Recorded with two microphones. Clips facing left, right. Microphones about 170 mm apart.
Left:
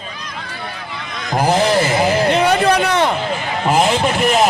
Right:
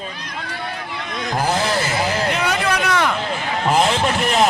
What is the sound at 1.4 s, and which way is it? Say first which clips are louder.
A man's voice: left 6 dB; 20° left (ahead or behind).